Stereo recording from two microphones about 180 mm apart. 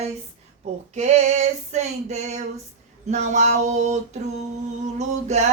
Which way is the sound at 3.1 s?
40° right (ahead or behind).